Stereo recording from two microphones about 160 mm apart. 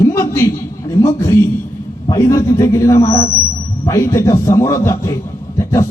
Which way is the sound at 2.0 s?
20° left (ahead or behind).